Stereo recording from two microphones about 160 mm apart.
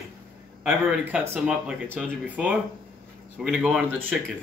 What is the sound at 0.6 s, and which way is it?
Speech, 5° right (ahead or behind).